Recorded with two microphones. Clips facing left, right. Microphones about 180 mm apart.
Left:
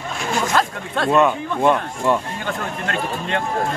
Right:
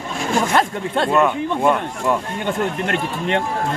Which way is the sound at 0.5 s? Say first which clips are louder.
Right 2 dB; 25° right (ahead or behind).